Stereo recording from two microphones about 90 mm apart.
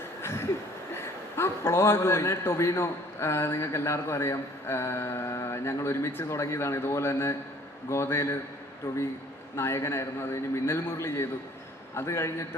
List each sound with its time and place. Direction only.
0.2 s a sound: 25° left (ahead or behind)
0.9 s a man's voice: 30° left (ahead or behind)
9.6 s a man's voice: 30° left (ahead or behind)